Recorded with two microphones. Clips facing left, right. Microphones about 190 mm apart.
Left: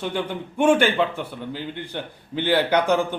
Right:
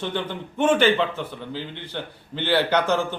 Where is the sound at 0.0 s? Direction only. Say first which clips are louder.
Left 1 dB; 10° left (ahead or behind).